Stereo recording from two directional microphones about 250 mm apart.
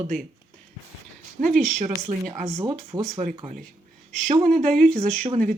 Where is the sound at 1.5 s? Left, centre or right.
Centre.